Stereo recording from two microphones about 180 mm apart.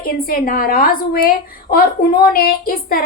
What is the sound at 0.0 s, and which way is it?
A woman's voice, 55° left (ahead or behind).